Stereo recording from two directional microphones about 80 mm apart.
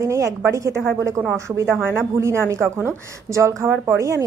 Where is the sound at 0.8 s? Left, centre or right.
Right.